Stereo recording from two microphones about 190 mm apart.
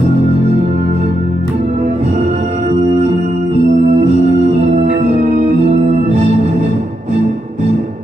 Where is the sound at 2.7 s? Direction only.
35° right (ahead or behind).